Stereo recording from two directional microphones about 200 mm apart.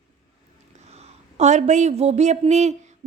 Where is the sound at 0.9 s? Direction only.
35° right (ahead or behind).